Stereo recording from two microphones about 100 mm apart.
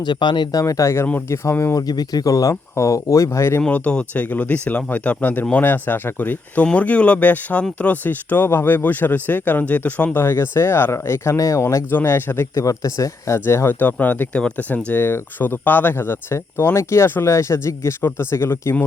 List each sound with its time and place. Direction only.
0.0 s speech: 50° left (ahead or behind)
0.6 s speech: 30° left (ahead or behind)
1.9 s speech: 40° left (ahead or behind)
3.6 s speech: 15° left (ahead or behind)
12.6 s speech: 35° left (ahead or behind)